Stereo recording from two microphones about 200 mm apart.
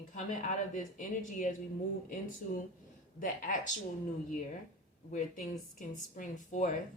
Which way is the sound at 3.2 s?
40° left (ahead or behind).